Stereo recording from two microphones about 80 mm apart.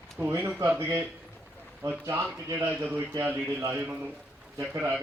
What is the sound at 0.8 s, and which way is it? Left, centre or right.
Speech, right.